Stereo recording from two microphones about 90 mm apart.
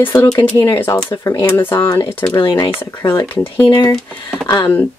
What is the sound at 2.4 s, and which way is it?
Speech, 55° left (ahead or behind).